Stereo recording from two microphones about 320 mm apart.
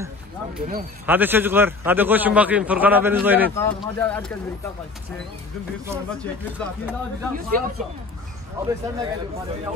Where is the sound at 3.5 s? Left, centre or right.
Centre.